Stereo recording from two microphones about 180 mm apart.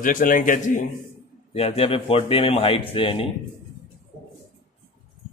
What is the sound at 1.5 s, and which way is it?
Speech, 35° left (ahead or behind).